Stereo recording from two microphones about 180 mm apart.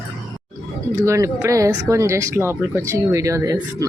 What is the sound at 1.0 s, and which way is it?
Speech, 15° right (ahead or behind).